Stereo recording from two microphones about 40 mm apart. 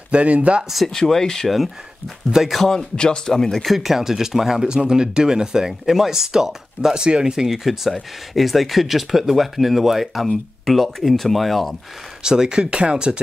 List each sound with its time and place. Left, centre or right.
0.1 s speech: right
0.8 s speech: centre
2.3 s speech: centre
2.7 s speech: centre
3.6 s speech: centre; by 7.4 s right
7.4 s speech: centre
12.2 s speech: centre